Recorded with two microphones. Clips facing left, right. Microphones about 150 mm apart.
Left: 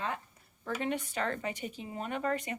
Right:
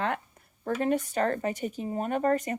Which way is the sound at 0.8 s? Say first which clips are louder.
Right 8 dB; 45° right (ahead or behind).